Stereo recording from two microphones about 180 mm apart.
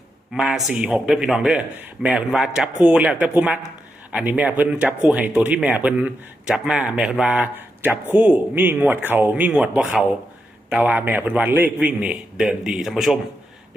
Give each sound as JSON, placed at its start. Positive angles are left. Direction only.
{"t": 0.3, "sound": "speech", "side_deg": -5}